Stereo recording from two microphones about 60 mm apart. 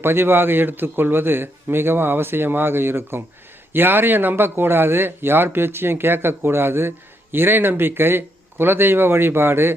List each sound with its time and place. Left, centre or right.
0.0 s speech: right